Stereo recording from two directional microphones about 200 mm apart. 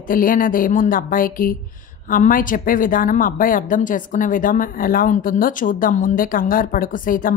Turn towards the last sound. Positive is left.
turn(degrees=45)  # may be behind; listen again after turning